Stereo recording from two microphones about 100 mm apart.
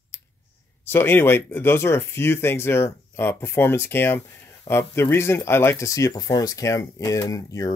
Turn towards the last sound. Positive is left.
turn(degrees=35)  # may be behind; listen again after turning